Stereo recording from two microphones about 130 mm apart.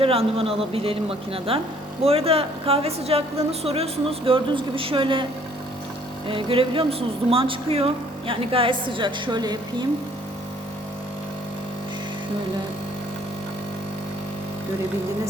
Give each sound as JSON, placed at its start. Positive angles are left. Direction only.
{"t": 0.0, "sound": "a woman's voice", "side_deg": -45}